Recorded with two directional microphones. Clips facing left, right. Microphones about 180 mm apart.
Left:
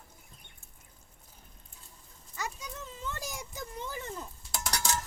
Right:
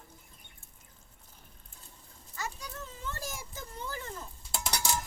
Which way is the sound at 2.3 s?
20° left (ahead or behind).